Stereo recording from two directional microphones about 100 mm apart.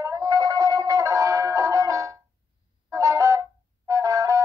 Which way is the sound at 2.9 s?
30° right (ahead or behind).